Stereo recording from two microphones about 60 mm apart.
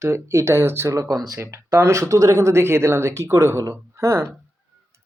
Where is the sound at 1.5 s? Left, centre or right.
Right.